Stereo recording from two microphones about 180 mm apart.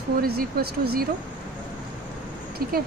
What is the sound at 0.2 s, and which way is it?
Speech, 55° right (ahead or behind).